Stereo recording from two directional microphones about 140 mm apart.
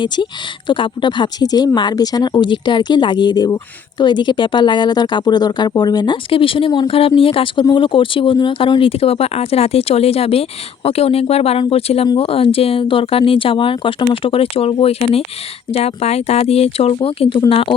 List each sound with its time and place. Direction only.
0.7 s speech: 35° left (ahead or behind)